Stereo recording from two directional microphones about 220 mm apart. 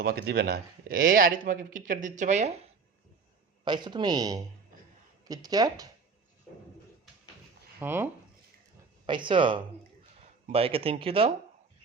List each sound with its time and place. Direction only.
0.0 s speech: 45° right (ahead or behind)
3.6 s speech: 20° right (ahead or behind)
7.8 s speech: 10° right (ahead or behind)
9.0 s speech: 20° right (ahead or behind)